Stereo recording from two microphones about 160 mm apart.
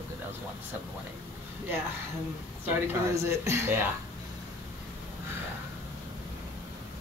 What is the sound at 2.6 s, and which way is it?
Speech, 15° right (ahead or behind).